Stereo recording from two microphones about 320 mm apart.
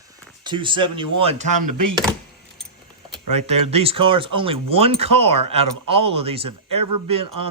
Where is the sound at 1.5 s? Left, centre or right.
Right.